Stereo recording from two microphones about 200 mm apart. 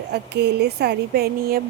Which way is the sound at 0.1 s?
55° right (ahead or behind).